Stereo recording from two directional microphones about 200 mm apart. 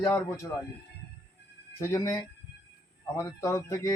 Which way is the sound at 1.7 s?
15° left (ahead or behind).